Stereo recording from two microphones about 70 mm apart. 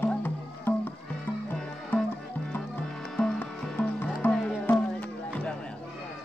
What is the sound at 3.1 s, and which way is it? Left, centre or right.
Music, centre.